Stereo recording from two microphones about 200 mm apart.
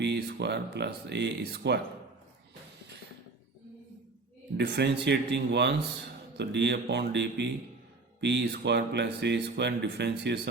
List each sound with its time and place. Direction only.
0.0 s speech: 60° right (ahead or behind)
4.5 s speech: 60° right (ahead or behind)